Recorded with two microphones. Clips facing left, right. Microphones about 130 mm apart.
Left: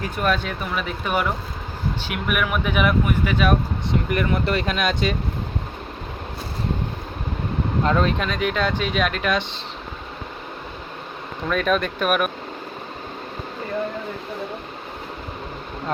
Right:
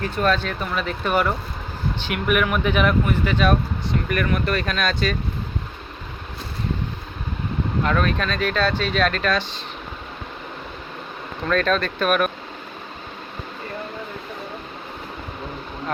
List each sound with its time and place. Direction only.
0.0 s speech: 10° left (ahead or behind)
4.1 s speech: 20° left (ahead or behind)
7.9 s speech: 20° left (ahead or behind)
11.4 s speech: 10° left (ahead or behind)